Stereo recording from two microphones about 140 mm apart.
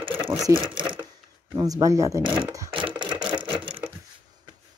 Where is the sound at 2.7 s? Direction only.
35° right (ahead or behind).